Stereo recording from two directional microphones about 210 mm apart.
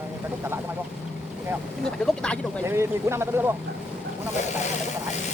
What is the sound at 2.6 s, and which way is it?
Speech, 15° right (ahead or behind).